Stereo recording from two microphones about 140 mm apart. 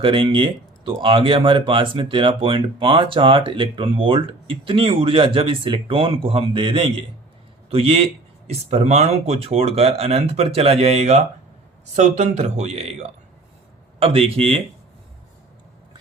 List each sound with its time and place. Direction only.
0.0 s speech: 40° right (ahead or behind)